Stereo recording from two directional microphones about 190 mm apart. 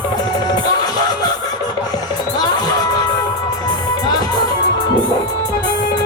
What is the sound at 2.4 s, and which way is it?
Music, 20° left (ahead or behind).